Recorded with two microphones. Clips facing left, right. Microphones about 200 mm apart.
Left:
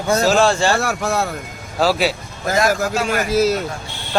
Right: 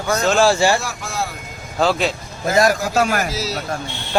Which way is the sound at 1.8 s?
5° left (ahead or behind).